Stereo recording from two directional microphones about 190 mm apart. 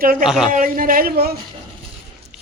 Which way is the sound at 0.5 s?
45° right (ahead or behind).